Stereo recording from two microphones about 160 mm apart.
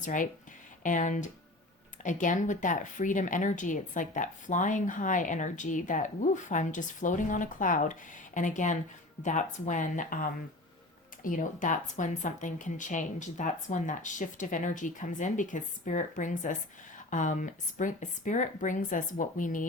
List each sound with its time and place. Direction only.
0.0 s speech: 55° left (ahead or behind)